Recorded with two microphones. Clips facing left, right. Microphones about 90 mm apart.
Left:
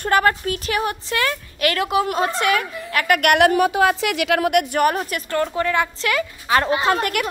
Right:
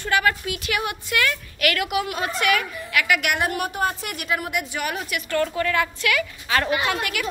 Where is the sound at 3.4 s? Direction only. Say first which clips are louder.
Left 9 dB; 90° left.